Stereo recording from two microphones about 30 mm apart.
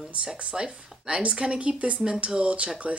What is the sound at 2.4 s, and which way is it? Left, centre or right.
Speech, right.